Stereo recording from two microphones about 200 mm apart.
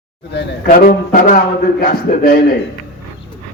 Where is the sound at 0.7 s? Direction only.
45° left (ahead or behind).